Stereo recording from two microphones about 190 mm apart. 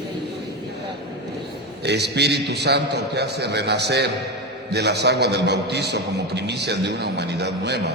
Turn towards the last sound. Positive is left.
turn(degrees=-60)  # may be behind; listen again after turning